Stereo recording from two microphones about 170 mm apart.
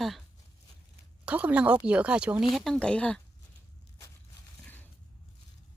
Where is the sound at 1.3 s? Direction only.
5° right (ahead or behind).